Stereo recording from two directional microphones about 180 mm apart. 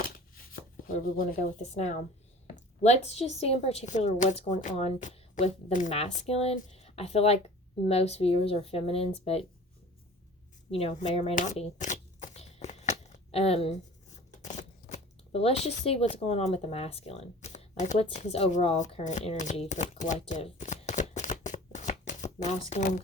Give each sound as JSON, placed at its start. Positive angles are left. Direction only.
{"t": 0.9, "sound": "speech", "side_deg": 50}
{"t": 1.7, "sound": "speech", "side_deg": 40}
{"t": 10.7, "sound": "speech", "side_deg": 35}
{"t": 11.3, "sound": "a sound", "side_deg": 40}
{"t": 14.4, "sound": "shuffling cards", "side_deg": 40}
{"t": 15.8, "sound": "speech", "side_deg": 35}